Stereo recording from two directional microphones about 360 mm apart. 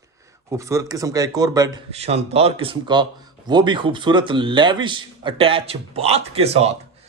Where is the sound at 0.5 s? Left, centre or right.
Centre.